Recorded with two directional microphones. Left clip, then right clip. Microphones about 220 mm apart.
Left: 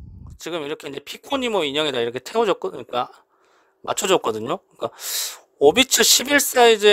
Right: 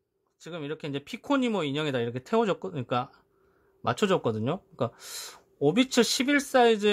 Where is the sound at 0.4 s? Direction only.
35° left (ahead or behind).